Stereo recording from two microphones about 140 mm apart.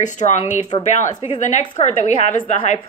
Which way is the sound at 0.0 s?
60° left (ahead or behind).